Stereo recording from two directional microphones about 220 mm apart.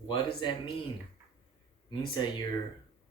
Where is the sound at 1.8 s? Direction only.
20° left (ahead or behind).